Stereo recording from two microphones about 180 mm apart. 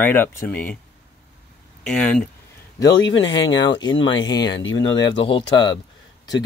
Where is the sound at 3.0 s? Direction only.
90° left.